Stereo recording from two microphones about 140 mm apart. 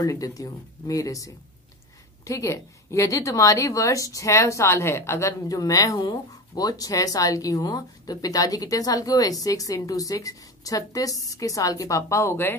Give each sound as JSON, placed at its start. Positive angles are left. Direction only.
{"t": 0.0, "sound": "speech", "side_deg": 25}